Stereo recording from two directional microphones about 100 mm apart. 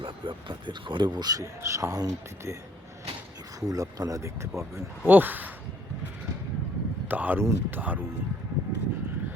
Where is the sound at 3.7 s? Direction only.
35° right (ahead or behind).